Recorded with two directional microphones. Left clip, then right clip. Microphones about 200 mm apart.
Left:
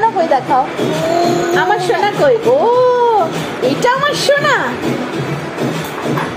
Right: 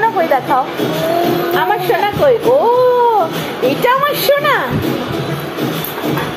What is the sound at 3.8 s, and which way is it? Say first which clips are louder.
Speech: even; 15° left (ahead or behind).